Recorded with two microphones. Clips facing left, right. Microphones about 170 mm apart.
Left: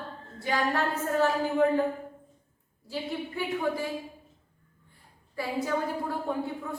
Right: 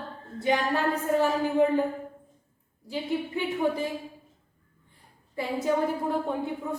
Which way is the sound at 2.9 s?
20° right (ahead or behind).